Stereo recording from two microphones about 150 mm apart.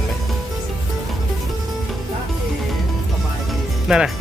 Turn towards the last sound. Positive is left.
turn(degrees=-5)  # may be behind; listen again after turning